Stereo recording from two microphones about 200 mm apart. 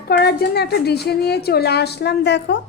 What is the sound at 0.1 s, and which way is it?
A woman's voice, 55° left (ahead or behind).